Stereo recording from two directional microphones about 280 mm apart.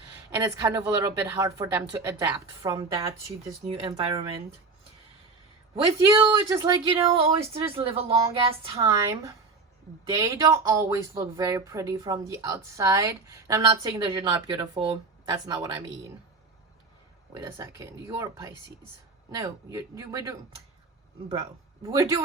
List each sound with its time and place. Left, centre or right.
0.3 s speech: centre
5.7 s speech: centre
17.3 s speech: centre
21.8 s speech: centre